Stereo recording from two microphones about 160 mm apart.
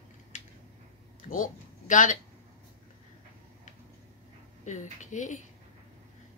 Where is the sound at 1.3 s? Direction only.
55° left (ahead or behind).